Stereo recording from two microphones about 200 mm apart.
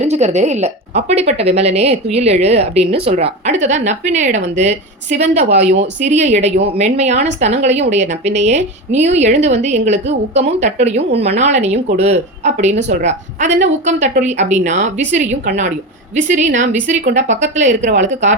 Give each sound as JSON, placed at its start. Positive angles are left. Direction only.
{"t": 0.0, "sound": "a woman's voice", "side_deg": -35}